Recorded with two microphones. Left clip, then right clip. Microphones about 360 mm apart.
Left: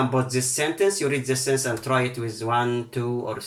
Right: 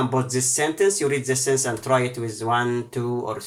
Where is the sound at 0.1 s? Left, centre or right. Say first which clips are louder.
Right 1 dB; centre.